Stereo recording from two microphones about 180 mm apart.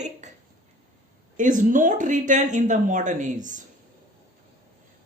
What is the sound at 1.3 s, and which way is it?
Speech, 45° right (ahead or behind).